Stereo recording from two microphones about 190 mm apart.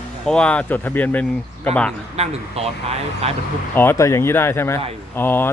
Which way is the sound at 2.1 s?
35° right (ahead or behind).